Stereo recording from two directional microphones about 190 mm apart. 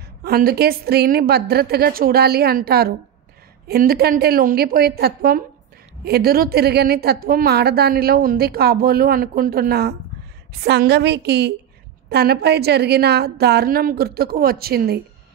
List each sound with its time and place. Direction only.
0.2 s a woman's voice: 55° right (ahead or behind)